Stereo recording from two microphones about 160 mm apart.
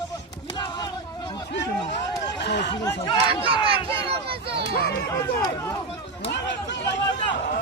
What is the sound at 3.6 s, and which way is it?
Speech, 35° right (ahead or behind).